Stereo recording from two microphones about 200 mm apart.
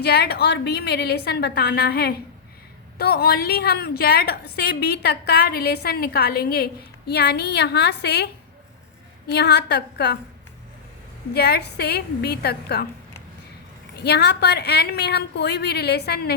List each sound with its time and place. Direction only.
0.0 s a woman's voice: 55° left (ahead or behind)
11.3 s a woman's voice: 55° left (ahead or behind)
13.9 s a woman's voice: 55° left (ahead or behind)